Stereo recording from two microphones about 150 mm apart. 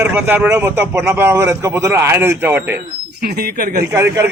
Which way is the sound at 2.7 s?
90° right.